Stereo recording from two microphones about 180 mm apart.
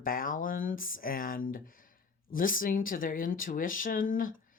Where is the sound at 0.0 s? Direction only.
50° left (ahead or behind).